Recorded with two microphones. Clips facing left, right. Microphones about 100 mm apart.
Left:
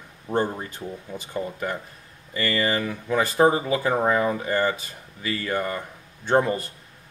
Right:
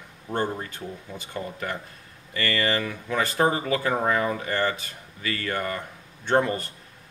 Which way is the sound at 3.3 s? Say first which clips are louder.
Left 5 dB; 25° left (ahead or behind).